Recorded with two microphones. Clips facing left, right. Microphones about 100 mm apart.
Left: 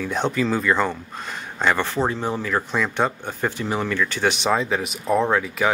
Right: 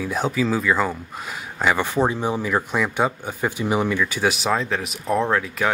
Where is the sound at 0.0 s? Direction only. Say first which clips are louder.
Even; 5° right (ahead or behind).